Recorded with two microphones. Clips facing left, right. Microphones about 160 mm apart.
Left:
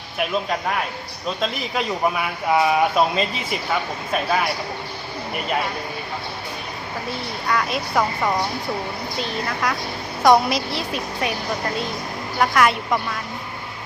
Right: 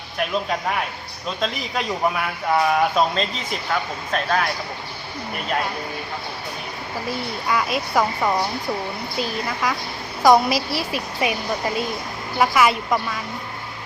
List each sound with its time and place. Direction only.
0.2 s speech: centre (ahead or behind)
7.4 s speech: 5° right (ahead or behind)